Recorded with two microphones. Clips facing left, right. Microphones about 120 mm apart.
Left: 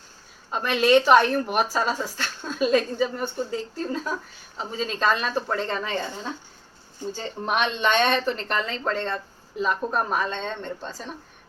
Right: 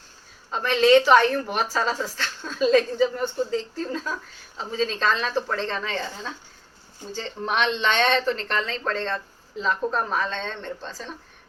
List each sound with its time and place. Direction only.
0.6 s speech: 10° left (ahead or behind)